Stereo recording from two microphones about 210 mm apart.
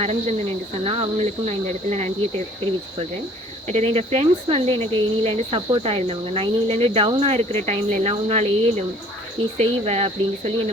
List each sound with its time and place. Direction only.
0.0 s speech: 30° right (ahead or behind)
3.7 s speech: 30° right (ahead or behind)